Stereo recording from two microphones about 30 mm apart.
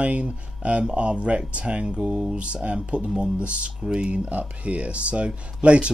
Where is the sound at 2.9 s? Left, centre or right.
Right.